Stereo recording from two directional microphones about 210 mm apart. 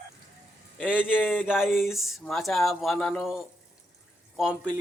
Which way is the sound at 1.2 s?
10° left (ahead or behind).